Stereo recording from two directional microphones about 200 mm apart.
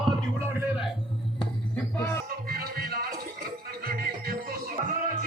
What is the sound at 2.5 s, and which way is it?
Music, 50° right (ahead or behind).